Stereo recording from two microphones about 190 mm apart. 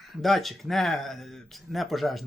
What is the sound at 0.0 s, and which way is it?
Speech, centre (ahead or behind).